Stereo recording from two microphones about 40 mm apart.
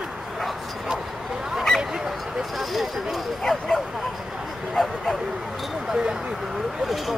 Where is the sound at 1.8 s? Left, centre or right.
Centre.